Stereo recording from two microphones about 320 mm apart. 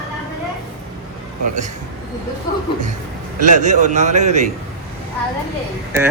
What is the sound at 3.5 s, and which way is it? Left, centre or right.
A man's voice, right.